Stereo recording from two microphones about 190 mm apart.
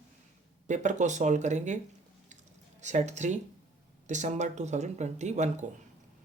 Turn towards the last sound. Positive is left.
turn(degrees=-40)  # may be behind; listen again after turning